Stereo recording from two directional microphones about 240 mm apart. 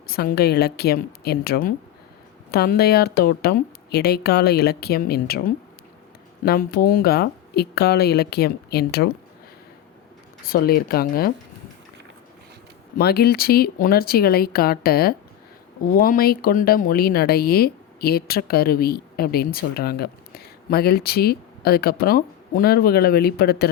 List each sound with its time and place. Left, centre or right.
0.1 s speech: left
6.4 s speech: left
10.4 s speech: left
13.0 s speech: left